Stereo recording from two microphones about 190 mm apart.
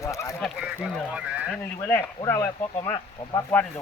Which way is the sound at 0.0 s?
15° left (ahead or behind).